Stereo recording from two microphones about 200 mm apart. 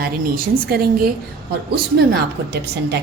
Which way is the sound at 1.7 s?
55° right (ahead or behind).